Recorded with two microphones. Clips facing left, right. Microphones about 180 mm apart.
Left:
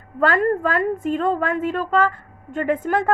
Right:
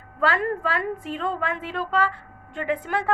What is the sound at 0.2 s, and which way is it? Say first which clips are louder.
A woman's voice: left 5 dB; 50° left (ahead or behind).